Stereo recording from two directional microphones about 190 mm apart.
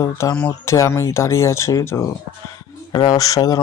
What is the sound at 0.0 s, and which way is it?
Speech, 15° left (ahead or behind).